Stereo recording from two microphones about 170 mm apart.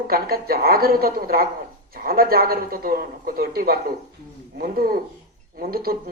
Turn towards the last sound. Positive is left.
turn(degrees=-60)  # may be behind; listen again after turning